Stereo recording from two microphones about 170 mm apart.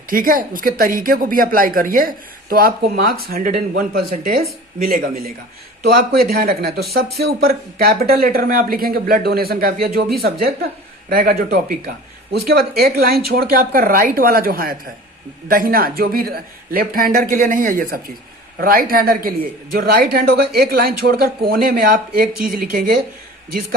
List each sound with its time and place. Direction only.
0.1 s a woman's voice: 55° right (ahead or behind)